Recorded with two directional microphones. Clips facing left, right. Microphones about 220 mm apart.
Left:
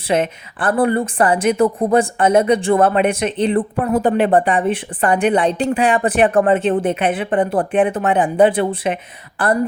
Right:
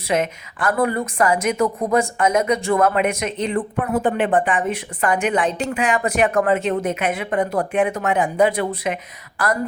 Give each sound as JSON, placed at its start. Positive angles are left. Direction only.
{"t": 0.1, "sound": "a woman's voice", "side_deg": 30}